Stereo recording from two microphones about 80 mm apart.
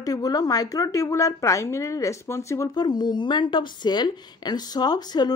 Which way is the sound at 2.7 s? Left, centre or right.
Left.